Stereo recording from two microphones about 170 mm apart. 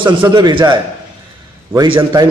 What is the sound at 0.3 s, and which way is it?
A man's voice, 25° right (ahead or behind).